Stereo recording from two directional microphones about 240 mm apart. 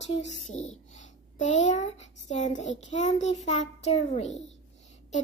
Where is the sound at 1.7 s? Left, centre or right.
Left.